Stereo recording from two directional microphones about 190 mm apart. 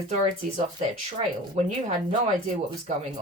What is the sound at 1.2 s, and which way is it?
Speech, 40° right (ahead or behind).